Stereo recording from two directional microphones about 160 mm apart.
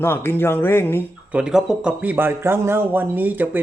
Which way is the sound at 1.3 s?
5° right (ahead or behind).